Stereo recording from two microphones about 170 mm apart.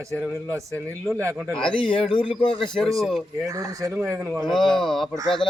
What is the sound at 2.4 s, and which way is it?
Speech, 30° left (ahead or behind).